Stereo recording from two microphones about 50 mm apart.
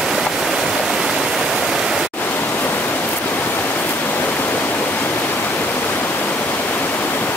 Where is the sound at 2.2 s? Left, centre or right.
Left.